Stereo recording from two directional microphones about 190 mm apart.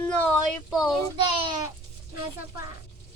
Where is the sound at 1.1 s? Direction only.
25° right (ahead or behind).